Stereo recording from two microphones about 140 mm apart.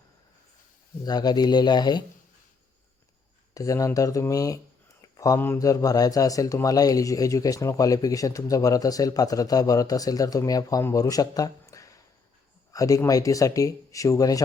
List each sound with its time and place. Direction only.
1.0 s speech: 30° left (ahead or behind)
3.5 s speech: 25° left (ahead or behind)
5.1 s a sound: 25° left (ahead or behind)
5.4 s speech: 20° left (ahead or behind)